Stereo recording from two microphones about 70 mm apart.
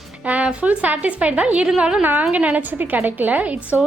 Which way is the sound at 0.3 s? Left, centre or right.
Centre.